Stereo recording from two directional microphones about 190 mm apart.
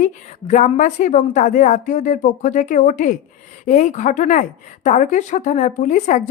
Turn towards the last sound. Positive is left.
turn(degrees=40)  # may be behind; listen again after turning